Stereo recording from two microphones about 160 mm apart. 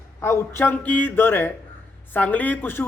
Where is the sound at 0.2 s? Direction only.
15° left (ahead or behind).